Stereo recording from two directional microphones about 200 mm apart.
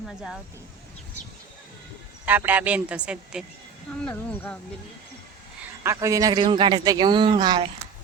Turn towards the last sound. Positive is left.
turn(degrees=-20)  # may be behind; listen again after turning